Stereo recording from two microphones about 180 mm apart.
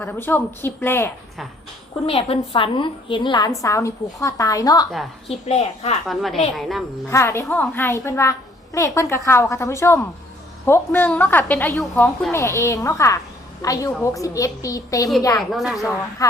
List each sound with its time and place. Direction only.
0.0 s a child's voice: 10° left (ahead or behind)
2.0 s a woman's voice: 35° left (ahead or behind)
5.3 s a woman's voice: 35° left (ahead or behind)
6.1 s speech: centre (ahead or behind)
7.1 s a child's voice: 15° left (ahead or behind)
15.4 s speech: centre (ahead or behind)
16.2 s a woman's voice: 20° left (ahead or behind)